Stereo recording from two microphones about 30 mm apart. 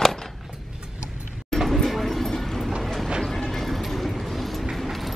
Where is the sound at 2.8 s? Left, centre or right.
Centre.